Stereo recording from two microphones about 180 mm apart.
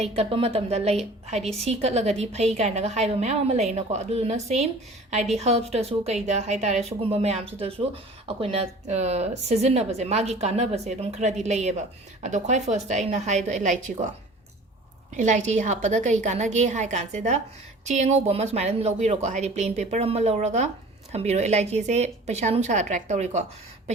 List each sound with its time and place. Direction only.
0.2 s a woman's voice: 30° right (ahead or behind)
15.1 s a woman's voice: 40° right (ahead or behind)